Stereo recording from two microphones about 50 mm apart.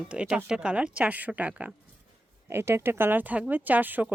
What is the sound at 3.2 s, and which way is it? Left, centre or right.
Speech, right.